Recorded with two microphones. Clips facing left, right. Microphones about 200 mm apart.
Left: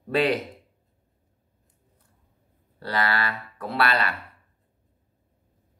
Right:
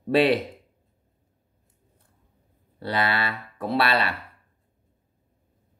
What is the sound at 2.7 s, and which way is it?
Speech, 20° right (ahead or behind).